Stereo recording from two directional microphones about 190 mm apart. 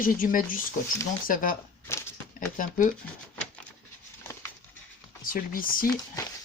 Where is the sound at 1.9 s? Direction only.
15° left (ahead or behind).